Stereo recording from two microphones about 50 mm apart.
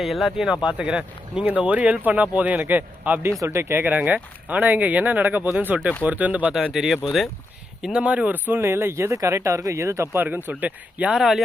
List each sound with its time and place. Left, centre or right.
0.0 s speech: centre
0.4 s a man's voice: centre; by 3.2 s right
3.3 s speech: right
5.7 s speech: centre
6.1 s speech: right
6.7 s speech: centre
7.9 s a man's voice: right
8.3 s speech: right
8.7 s speech: right
10.2 s speech: right
10.6 s speech: right
11.1 s speech: centre